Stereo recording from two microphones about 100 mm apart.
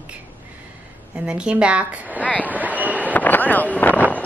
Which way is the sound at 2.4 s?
15° right (ahead or behind).